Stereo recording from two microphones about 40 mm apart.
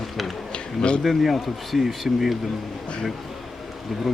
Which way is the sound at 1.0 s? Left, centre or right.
Centre.